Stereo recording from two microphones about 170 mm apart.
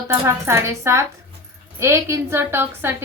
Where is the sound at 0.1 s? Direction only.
15° right (ahead or behind).